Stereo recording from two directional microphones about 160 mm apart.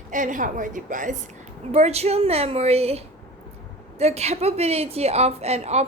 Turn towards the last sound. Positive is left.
turn(degrees=-45)  # may be behind; listen again after turning